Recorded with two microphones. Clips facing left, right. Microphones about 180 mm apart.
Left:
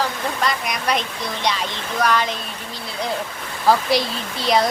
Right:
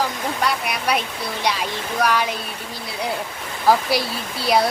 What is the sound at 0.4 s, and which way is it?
Speech, 10° right (ahead or behind).